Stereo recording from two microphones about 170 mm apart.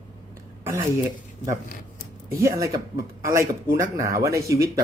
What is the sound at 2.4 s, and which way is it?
Speech, 20° right (ahead or behind).